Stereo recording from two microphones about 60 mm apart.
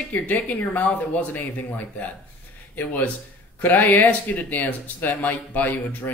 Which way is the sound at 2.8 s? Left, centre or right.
Left.